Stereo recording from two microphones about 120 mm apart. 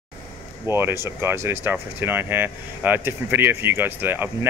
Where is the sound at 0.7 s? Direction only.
20° right (ahead or behind).